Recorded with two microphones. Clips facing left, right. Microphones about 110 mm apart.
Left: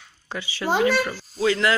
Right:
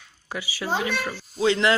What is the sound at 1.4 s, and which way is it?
Speech, 25° right (ahead or behind).